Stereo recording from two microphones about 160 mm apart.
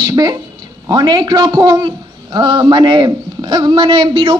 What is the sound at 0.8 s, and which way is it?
A man's voice, 25° right (ahead or behind).